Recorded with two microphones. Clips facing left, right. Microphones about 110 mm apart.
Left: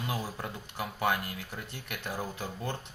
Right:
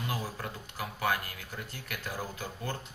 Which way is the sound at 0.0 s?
25° left (ahead or behind).